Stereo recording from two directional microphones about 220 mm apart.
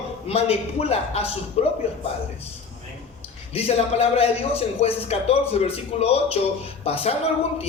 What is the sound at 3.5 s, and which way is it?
A man's voice, 25° left (ahead or behind).